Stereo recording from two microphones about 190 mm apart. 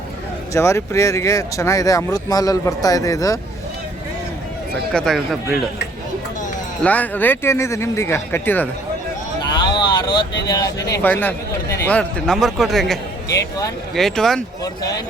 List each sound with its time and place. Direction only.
0.5 s speech: 15° left (ahead or behind)
4.9 s a man's voice: centre (ahead or behind)
6.8 s speech: 10° left (ahead or behind)
9.4 s vehicle: 25° left (ahead or behind)
10.8 s a man's voice: 15° left (ahead or behind)
14.6 s speech: 20° left (ahead or behind)